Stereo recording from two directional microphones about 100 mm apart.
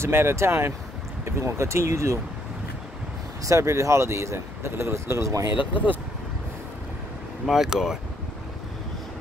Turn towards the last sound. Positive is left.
turn(degrees=-5)  # may be behind; listen again after turning